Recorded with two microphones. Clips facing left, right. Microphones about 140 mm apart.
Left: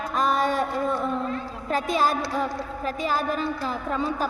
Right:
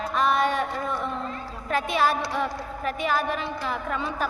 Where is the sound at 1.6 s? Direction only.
40° left (ahead or behind).